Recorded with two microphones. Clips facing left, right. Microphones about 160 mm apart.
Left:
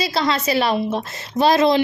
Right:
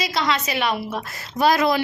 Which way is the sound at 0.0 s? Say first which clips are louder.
Left 3 dB; 30° left (ahead or behind).